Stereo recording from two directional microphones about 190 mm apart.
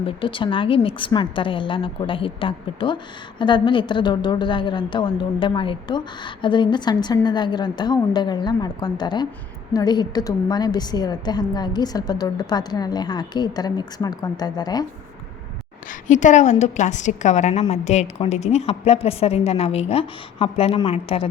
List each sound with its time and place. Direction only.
0.0 s a woman's voice: 25° left (ahead or behind)
15.9 s a woman's voice: 40° left (ahead or behind)